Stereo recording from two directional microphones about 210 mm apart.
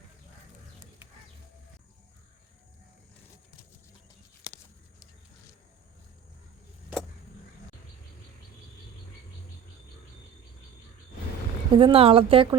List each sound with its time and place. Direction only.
11.7 s speech: 25° right (ahead or behind)